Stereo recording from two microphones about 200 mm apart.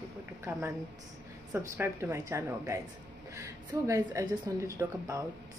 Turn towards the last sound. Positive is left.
turn(degrees=-15)  # may be behind; listen again after turning